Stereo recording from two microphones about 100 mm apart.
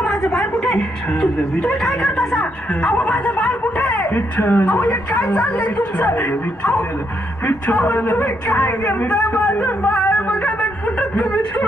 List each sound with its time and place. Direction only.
0.0 s a woman's voice: 5° left (ahead or behind)